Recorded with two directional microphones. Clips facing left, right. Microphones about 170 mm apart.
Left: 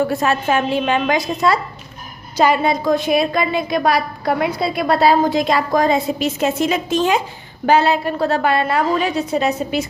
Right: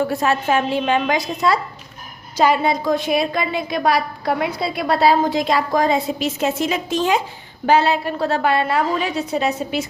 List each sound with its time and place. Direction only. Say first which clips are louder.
0.2 s a woman's voice: left 1 dB; 65° left (ahead or behind)
7.7 s a woman's voice: left 1 dB; 45° left (ahead or behind)